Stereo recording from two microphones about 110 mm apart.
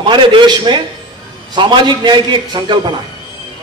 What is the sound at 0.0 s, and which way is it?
A man's voice, 45° right (ahead or behind).